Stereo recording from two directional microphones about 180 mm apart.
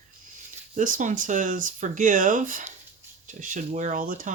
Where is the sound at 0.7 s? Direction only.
45° right (ahead or behind).